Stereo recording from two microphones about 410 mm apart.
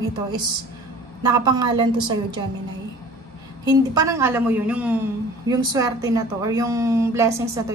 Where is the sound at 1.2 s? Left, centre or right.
Centre.